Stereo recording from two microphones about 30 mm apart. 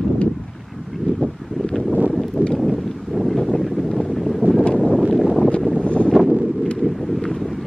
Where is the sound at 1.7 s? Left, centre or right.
Left.